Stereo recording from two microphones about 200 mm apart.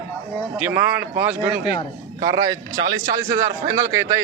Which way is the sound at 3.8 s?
15° right (ahead or behind).